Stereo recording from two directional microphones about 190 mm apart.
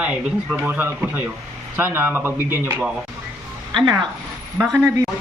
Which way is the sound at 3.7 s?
25° right (ahead or behind).